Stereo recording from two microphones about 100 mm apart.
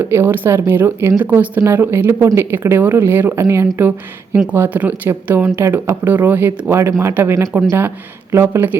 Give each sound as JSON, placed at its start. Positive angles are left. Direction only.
{"t": 0.0, "sound": "speech", "side_deg": -25}